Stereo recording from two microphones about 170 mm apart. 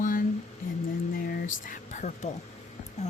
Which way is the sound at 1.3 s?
55° left (ahead or behind).